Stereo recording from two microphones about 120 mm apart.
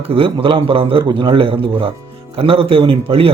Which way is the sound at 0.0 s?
50° right (ahead or behind).